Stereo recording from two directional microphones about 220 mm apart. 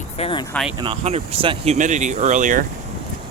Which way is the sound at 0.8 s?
25° right (ahead or behind).